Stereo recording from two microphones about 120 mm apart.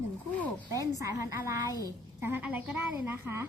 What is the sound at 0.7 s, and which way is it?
A woman's voice, 25° right (ahead or behind).